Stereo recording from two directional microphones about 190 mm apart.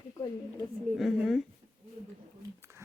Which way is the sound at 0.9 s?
Centre (ahead or behind).